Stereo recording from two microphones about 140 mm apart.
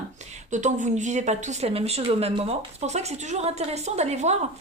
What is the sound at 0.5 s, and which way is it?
A woman's voice, 60° right (ahead or behind).